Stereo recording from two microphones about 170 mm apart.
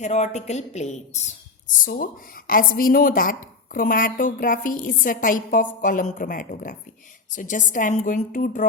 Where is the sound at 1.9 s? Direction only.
55° left (ahead or behind).